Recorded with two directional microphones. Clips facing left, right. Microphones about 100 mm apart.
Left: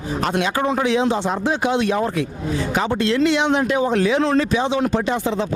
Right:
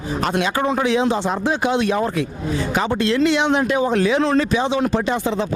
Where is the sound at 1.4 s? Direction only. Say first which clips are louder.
Even; 25° right (ahead or behind).